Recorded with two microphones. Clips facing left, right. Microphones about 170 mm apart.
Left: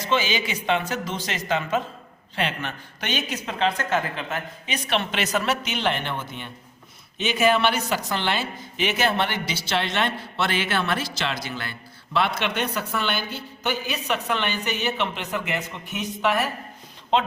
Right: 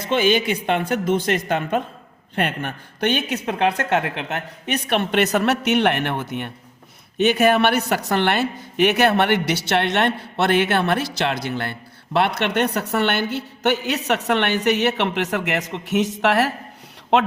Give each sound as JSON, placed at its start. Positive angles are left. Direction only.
{"t": 0.0, "sound": "a woman's voice", "side_deg": -55}